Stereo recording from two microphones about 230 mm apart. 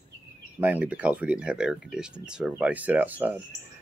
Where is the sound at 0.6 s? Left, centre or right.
Centre.